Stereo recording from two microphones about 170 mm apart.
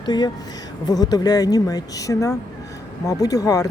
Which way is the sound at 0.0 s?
25° left (ahead or behind).